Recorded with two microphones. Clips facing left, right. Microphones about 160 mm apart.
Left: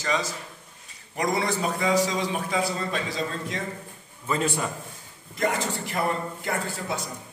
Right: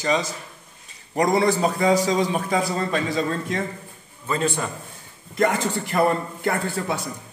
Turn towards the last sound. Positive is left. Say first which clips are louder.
# right 4 dB
turn(degrees=-70)  # may be behind; listen again after turning